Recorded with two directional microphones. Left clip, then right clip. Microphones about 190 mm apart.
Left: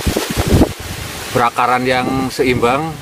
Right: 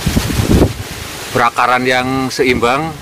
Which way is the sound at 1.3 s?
Centre (ahead or behind).